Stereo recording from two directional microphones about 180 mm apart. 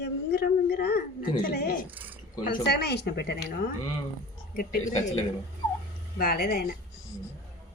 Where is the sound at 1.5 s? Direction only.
60° left (ahead or behind).